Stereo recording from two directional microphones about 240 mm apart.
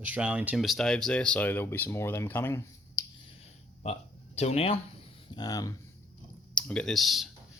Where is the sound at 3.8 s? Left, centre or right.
Left.